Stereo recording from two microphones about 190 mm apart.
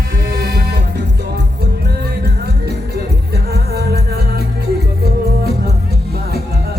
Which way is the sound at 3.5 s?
55° right (ahead or behind).